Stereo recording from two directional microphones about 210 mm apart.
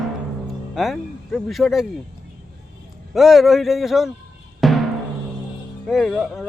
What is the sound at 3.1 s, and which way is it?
A man's voice, centre (ahead or behind).